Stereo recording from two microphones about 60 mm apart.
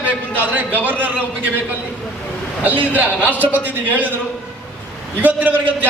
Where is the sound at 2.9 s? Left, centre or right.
Right.